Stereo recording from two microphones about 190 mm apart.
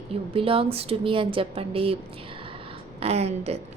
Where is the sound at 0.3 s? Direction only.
30° right (ahead or behind).